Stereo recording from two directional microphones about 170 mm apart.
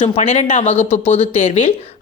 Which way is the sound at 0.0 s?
40° left (ahead or behind).